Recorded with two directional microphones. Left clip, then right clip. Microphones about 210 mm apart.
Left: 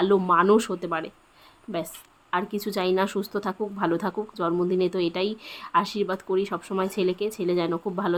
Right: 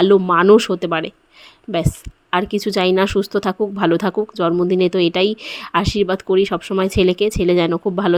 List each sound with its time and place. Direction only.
0.0 s speech: 30° right (ahead or behind)
2.3 s speech: 35° right (ahead or behind)